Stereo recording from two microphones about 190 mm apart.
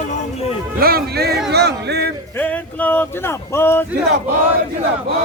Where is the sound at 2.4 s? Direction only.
10° left (ahead or behind).